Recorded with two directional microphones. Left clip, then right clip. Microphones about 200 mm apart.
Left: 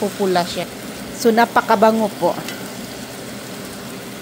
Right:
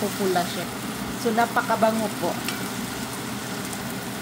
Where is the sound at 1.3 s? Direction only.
45° left (ahead or behind).